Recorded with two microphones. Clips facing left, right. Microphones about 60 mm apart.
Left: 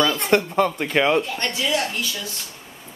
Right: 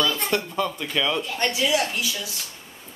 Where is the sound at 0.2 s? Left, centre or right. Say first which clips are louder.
Left 6 dB; left.